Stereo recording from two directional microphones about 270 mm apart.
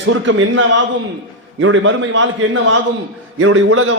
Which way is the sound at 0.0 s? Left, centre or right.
Right.